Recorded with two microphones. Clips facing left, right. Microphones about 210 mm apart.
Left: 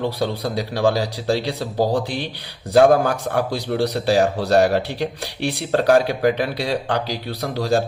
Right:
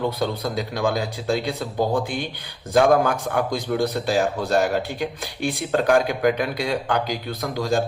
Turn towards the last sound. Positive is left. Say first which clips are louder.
# left 3 dB
turn(degrees=35)  # may be behind; listen again after turning